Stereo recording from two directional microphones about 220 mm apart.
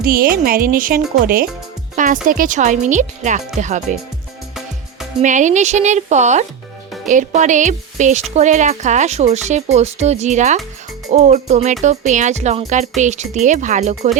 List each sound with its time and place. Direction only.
0.0 s speech: 40° right (ahead or behind)
2.2 s speech: 40° right (ahead or behind)
5.2 s speech: 35° right (ahead or behind)